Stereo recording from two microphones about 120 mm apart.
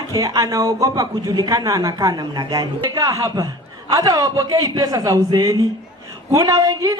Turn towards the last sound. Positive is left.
turn(degrees=-30)  # may be behind; listen again after turning